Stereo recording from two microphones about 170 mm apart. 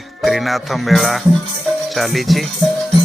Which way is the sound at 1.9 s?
Centre (ahead or behind).